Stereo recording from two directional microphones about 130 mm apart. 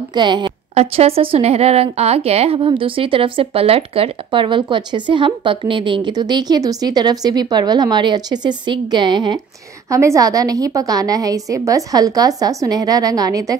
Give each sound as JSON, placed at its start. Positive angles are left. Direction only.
{"t": 0.1, "sound": "a woman's voice", "side_deg": -35}
{"t": 0.7, "sound": "a woman's voice", "side_deg": -50}
{"t": 9.8, "sound": "a woman's voice", "side_deg": -25}